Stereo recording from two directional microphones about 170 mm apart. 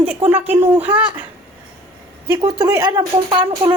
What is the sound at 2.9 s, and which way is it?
Speech, 30° right (ahead or behind).